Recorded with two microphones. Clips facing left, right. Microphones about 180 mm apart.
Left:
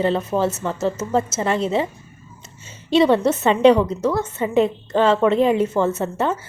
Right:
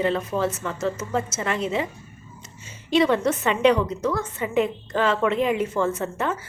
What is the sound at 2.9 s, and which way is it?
Speech, 30° left (ahead or behind).